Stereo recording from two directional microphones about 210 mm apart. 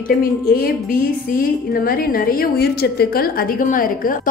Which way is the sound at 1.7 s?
45° left (ahead or behind).